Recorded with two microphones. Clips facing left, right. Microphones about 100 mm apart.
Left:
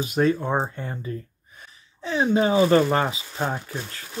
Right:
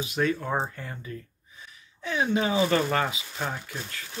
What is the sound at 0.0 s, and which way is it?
Speech, 35° left (ahead or behind).